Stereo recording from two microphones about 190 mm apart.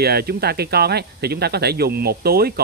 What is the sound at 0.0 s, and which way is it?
Speech, 55° right (ahead or behind).